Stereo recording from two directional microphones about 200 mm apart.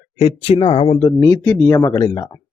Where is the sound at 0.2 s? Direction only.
30° left (ahead or behind).